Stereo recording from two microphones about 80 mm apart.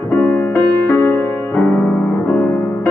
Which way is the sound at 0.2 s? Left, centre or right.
Left.